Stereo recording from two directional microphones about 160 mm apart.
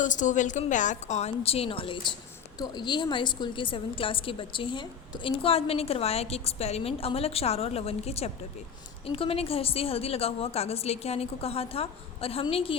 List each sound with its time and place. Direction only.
0.0 s a woman's voice: 50° left (ahead or behind); by 12.7 s 35° left (ahead or behind)